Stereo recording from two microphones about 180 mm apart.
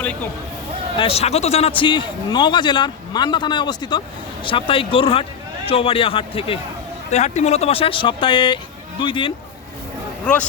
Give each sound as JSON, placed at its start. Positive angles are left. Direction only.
{"t": 0.9, "sound": "speech", "side_deg": 35}
{"t": 10.3, "sound": "speech", "side_deg": 5}